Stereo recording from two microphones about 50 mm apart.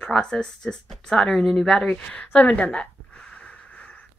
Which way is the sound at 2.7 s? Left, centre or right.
Centre.